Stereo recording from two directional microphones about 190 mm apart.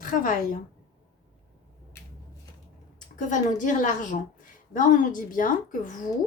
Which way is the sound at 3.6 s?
45° left (ahead or behind).